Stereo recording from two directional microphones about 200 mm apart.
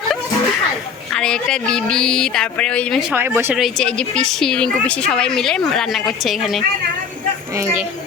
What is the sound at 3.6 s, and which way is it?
Speech, 5° left (ahead or behind).